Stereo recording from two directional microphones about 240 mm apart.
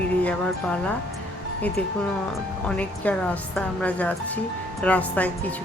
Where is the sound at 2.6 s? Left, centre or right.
Centre.